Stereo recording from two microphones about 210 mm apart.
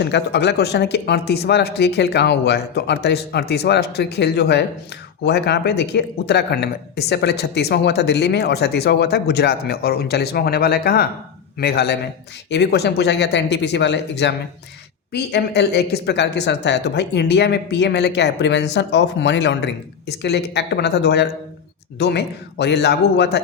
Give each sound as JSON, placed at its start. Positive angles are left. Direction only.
{"t": 0.0, "sound": "a man's voice", "side_deg": 55}